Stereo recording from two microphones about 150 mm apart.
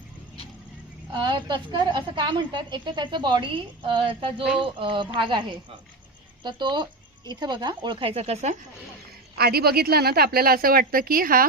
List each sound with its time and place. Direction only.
1.1 s a woman's voice: 30° right (ahead or behind); by 8.5 s 45° right (ahead or behind)
9.4 s a woman's voice: 90° right; by 11.4 s 75° right (ahead or behind)